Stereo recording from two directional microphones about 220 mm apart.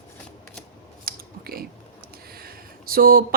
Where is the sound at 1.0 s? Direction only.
45° right (ahead or behind).